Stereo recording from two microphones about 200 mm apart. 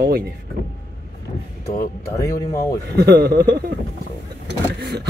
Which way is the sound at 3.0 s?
50° right (ahead or behind).